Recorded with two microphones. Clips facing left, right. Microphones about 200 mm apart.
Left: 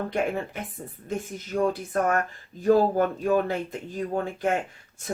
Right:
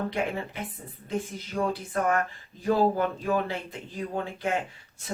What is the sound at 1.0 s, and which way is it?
Speech, 45° left (ahead or behind).